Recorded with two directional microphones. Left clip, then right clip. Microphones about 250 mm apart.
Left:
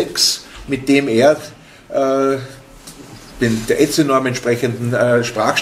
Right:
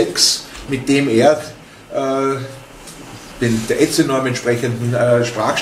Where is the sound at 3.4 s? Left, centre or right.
Left.